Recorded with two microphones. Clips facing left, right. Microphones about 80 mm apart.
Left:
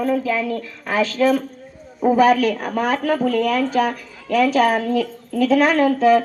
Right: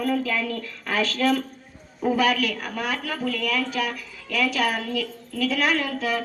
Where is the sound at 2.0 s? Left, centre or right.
Left.